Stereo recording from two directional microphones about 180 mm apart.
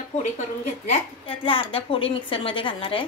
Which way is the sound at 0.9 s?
30° left (ahead or behind).